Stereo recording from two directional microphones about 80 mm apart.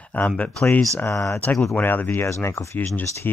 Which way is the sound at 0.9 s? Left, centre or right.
Left.